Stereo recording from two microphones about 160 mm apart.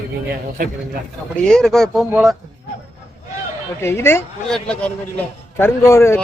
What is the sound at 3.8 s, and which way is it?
A man's voice, 15° left (ahead or behind).